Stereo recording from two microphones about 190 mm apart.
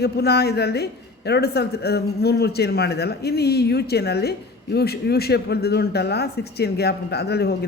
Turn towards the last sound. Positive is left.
turn(degrees=60)  # may be behind; listen again after turning